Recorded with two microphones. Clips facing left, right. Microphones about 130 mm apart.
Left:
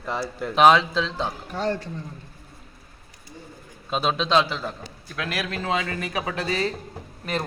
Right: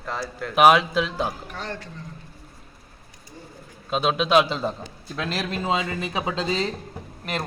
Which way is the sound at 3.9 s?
Centre (ahead or behind).